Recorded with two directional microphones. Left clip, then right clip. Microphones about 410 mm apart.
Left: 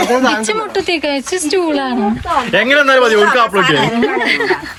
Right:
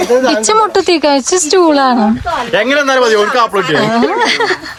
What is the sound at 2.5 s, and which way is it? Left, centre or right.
Speech, right.